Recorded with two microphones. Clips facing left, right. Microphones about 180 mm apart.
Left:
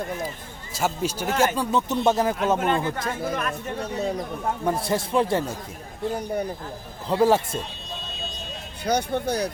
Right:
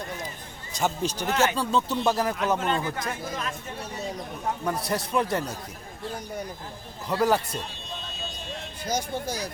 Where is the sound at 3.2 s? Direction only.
60° left (ahead or behind).